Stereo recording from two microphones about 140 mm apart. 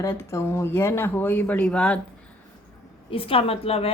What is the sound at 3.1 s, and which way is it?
Speech, 45° left (ahead or behind).